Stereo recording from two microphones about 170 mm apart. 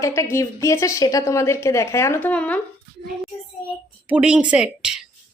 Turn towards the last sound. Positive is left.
turn(degrees=-5)  # may be behind; listen again after turning